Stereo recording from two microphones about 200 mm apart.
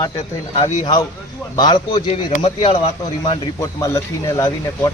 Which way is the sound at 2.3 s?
30° left (ahead or behind).